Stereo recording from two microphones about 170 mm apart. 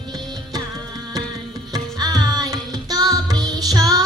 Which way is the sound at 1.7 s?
25° right (ahead or behind).